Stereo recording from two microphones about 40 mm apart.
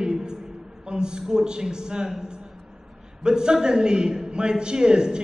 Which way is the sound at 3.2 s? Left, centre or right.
Centre.